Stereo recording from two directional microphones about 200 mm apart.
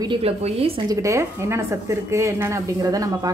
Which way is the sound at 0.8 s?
15° right (ahead or behind).